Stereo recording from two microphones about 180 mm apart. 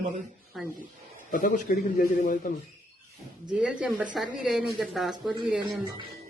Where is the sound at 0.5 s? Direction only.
Centre (ahead or behind).